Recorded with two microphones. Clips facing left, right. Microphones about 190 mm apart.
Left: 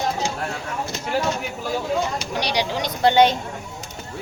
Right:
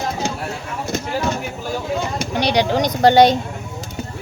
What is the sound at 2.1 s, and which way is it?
Speech, 55° right (ahead or behind).